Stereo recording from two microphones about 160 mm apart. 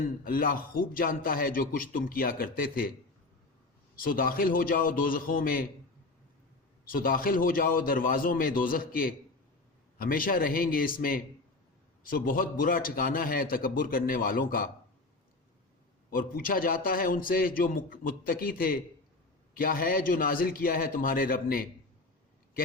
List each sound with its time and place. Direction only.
0.3 s speech: 65° left (ahead or behind)
3.9 s speech: 65° left (ahead or behind)
6.8 s speech: 65° left (ahead or behind)
16.1 s speech: 65° left (ahead or behind)